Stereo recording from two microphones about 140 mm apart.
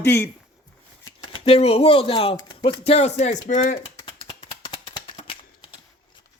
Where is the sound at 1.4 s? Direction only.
45° left (ahead or behind).